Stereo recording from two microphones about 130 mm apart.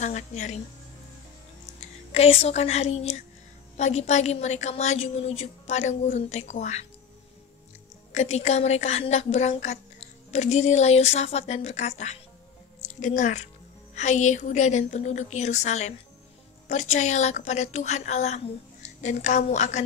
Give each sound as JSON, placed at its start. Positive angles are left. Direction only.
{"t": 0.0, "sound": "a woman's voice", "side_deg": 65}
{"t": 2.1, "sound": "a woman's voice", "side_deg": 50}
{"t": 8.1, "sound": "a woman's voice", "side_deg": 60}